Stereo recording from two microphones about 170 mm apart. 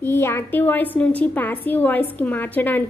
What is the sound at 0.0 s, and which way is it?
A woman's voice, 15° left (ahead or behind).